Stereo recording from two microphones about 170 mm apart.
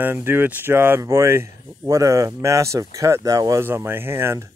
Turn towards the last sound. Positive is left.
turn(degrees=-15)  # may be behind; listen again after turning